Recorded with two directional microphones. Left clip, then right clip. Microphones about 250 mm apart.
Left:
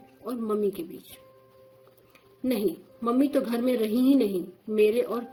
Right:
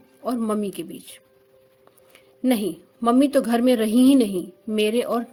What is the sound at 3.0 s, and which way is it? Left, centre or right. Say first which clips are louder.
A woman's voice: right 6 dB; right.